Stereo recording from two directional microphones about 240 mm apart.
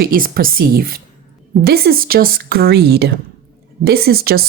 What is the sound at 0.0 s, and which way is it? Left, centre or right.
Speech, right.